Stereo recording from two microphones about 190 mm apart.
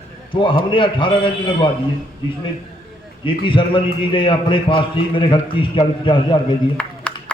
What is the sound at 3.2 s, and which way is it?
A man's voice, 25° left (ahead or behind).